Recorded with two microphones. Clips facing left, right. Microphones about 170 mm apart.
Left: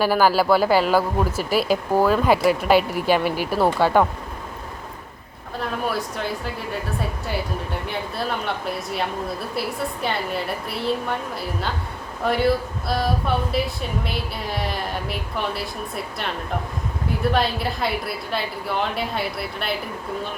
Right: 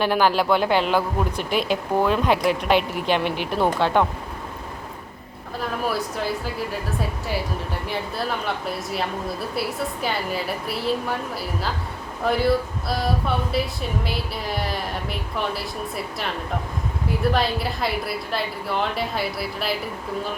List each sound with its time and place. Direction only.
0.0 s speech: 5° left (ahead or behind)
5.5 s speech: centre (ahead or behind)